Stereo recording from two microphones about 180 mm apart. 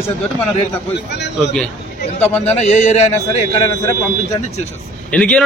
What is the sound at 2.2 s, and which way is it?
Speech, 10° left (ahead or behind).